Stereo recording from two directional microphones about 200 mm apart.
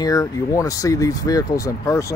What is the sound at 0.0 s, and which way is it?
Speech, 15° left (ahead or behind).